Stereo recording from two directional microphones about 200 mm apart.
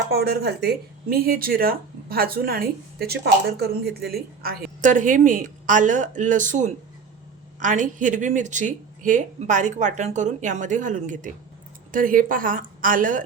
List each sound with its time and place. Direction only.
0.1 s speech: 55° right (ahead or behind)